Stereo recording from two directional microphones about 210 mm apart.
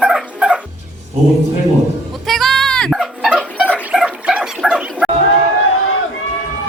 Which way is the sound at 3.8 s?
5° right (ahead or behind).